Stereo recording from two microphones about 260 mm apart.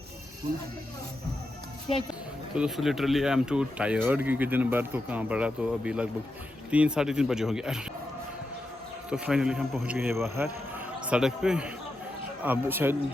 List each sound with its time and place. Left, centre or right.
2.6 s speech: centre
9.0 s speech: centre